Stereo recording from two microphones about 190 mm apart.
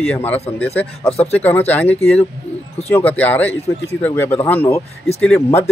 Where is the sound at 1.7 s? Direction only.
10° left (ahead or behind).